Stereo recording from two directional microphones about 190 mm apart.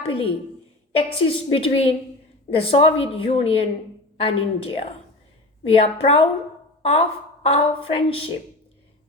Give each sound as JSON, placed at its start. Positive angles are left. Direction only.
{"t": 0.1, "sound": "a sound", "side_deg": 30}
{"t": 0.9, "sound": "a woman's voice", "side_deg": 30}
{"t": 7.4, "sound": "a woman's voice", "side_deg": 30}